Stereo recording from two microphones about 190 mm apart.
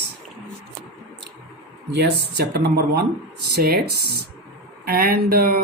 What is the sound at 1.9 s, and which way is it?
Speech, 60° right (ahead or behind).